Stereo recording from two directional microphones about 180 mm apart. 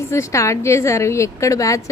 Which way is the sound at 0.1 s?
15° left (ahead or behind).